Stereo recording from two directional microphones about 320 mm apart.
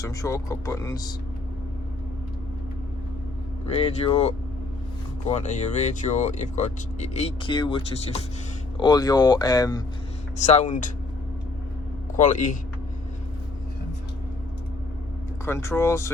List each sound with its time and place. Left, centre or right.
0.0 s speech: centre
3.8 s speech: centre
12.1 s speech: left
15.4 s speech: centre